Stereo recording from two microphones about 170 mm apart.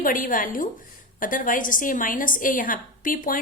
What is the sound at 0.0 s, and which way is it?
A woman's voice, 55° left (ahead or behind).